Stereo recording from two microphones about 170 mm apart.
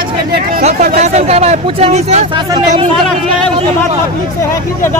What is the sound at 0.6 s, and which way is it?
Speech, 45° right (ahead or behind).